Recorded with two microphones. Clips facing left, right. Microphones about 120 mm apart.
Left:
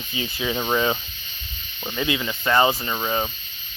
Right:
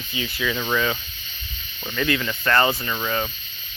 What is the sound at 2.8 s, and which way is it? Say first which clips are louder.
Speech: left 1 dB; 25° left (ahead or behind).